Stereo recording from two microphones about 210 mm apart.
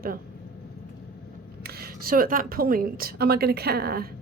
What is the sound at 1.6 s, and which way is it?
Speech, 45° right (ahead or behind).